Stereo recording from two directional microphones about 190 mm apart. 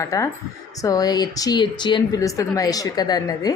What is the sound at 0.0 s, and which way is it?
Speech, 15° left (ahead or behind).